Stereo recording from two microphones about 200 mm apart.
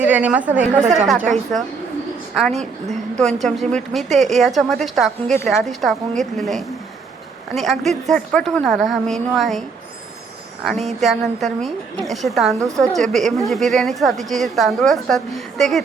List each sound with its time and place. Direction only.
0.0 s a woman's voice: 10° right (ahead or behind)
12.5 s a woman's voice: 15° right (ahead or behind)
12.9 s a woman's voice: centre (ahead or behind)